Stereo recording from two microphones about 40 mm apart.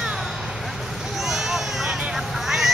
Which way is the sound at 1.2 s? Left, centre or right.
Centre.